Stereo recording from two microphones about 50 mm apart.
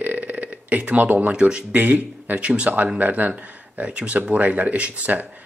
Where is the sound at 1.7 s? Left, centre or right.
Right.